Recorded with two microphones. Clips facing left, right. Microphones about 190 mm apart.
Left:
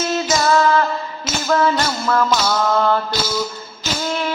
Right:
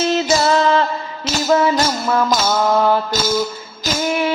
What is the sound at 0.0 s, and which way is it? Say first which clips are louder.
Music: right 3 dB; 30° right (ahead or behind).